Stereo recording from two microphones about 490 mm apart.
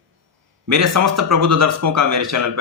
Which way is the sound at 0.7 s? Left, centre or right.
Right.